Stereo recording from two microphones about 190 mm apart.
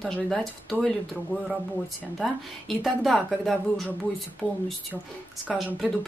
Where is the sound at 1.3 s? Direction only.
10° left (ahead or behind).